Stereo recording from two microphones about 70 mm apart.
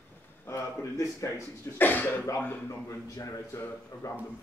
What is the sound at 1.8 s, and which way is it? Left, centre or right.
Speech, left.